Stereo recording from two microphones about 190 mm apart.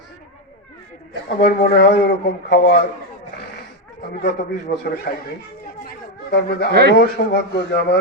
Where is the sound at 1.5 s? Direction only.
55° left (ahead or behind).